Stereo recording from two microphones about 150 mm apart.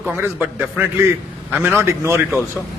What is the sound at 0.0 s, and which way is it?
A man's voice, 15° right (ahead or behind).